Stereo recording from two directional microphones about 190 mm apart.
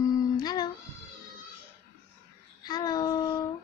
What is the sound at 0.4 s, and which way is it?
Music, 20° left (ahead or behind).